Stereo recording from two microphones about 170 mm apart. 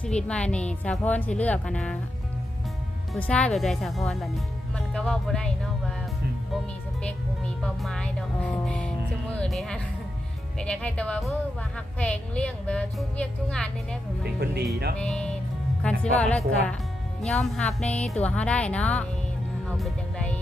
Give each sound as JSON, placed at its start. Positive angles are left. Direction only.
{"t": 0.0, "sound": "a woman's voice", "side_deg": 5}
{"t": 3.1, "sound": "speech", "side_deg": 5}
{"t": 7.0, "sound": "a woman's voice", "side_deg": 5}
{"t": 14.3, "sound": "speech", "side_deg": -70}
{"t": 14.9, "sound": "a woman's voice", "side_deg": 5}
{"t": 19.6, "sound": "music", "side_deg": 5}